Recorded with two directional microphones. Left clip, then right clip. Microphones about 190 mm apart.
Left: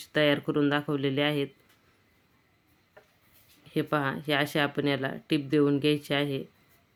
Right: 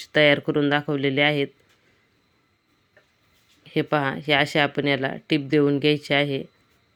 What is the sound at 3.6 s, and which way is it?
Speech, 20° right (ahead or behind).